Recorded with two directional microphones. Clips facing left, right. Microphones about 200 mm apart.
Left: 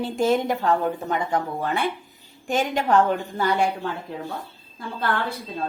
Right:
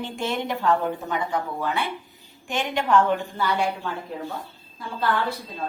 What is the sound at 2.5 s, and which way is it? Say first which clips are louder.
A woman's voice: left 2 dB; 40° left (ahead or behind).